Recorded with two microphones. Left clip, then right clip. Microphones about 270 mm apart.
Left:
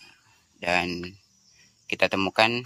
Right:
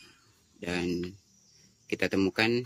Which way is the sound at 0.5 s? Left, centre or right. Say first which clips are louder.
Left 8 dB; centre.